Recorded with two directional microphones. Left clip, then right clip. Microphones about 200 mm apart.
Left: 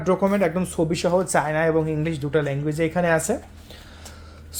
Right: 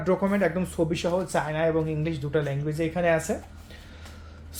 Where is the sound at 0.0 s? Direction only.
20° left (ahead or behind); by 3.3 s 40° left (ahead or behind).